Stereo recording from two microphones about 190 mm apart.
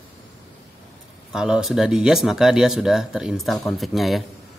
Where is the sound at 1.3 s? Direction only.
5° right (ahead or behind).